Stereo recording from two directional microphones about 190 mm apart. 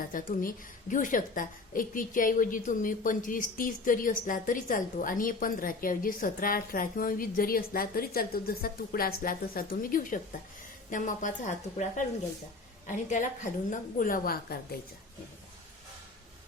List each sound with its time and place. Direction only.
0.1 s a woman's voice: 45° left (ahead or behind)
12.9 s a woman's voice: 40° left (ahead or behind)